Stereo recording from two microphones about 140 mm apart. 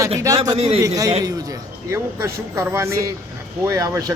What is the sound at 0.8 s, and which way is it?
Speech, 25° right (ahead or behind).